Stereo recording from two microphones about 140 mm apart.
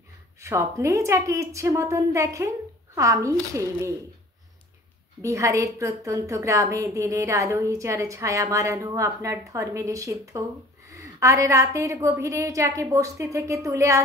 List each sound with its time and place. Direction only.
0.4 s a woman's voice: 20° right (ahead or behind)
5.2 s a woman's voice: 20° right (ahead or behind)